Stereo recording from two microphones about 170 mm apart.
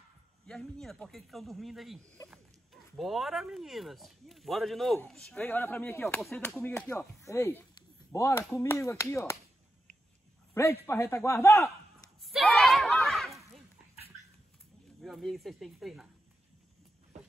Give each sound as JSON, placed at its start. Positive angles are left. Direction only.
{"t": 0.5, "sound": "speech", "side_deg": 5}
{"t": 10.5, "sound": "speech", "side_deg": 15}
{"t": 12.2, "sound": "a sound", "side_deg": 0}
{"t": 15.0, "sound": "speech", "side_deg": 0}